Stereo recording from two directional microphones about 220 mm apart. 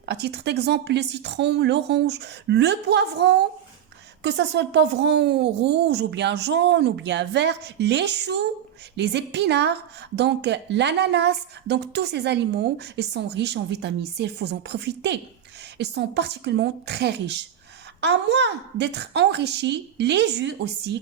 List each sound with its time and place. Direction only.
0.0 s a woman's voice: 50° right (ahead or behind)